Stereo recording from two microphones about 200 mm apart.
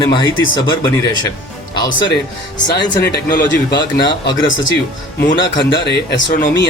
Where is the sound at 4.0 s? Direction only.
20° left (ahead or behind).